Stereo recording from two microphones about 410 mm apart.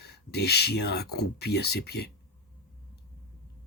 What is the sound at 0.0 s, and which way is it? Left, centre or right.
Speech, left.